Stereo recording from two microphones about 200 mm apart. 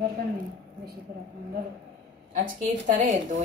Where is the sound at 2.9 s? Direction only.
40° right (ahead or behind).